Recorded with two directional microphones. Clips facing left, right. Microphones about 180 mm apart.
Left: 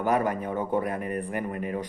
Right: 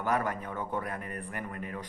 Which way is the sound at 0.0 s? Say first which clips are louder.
Left 6 dB; 15° left (ahead or behind).